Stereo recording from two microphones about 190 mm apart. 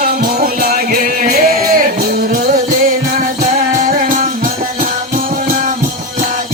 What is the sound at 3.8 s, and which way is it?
Music, 45° right (ahead or behind).